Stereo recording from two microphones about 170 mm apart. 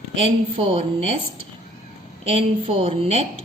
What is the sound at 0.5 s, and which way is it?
Speech, 30° right (ahead or behind).